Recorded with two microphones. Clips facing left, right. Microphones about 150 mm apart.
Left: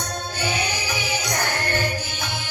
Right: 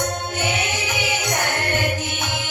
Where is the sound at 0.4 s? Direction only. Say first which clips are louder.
Even; 20° right (ahead or behind).